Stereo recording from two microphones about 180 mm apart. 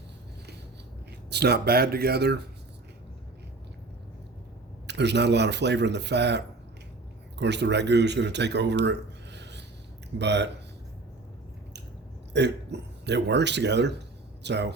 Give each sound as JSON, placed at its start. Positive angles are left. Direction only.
{"t": 1.3, "sound": "speech", "side_deg": -65}
{"t": 4.9, "sound": "speech", "side_deg": -70}
{"t": 12.3, "sound": "speech", "side_deg": -70}